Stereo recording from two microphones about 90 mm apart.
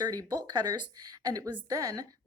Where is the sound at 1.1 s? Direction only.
40° right (ahead or behind).